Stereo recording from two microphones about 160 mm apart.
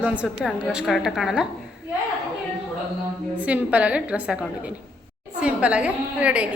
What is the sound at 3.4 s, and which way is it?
A woman's voice, 10° right (ahead or behind).